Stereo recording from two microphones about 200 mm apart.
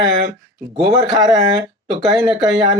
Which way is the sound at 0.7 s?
20° right (ahead or behind).